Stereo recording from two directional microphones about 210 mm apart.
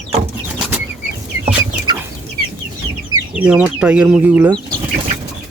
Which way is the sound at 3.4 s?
5° right (ahead or behind).